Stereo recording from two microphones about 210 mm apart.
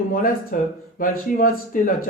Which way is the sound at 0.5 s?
40° left (ahead or behind).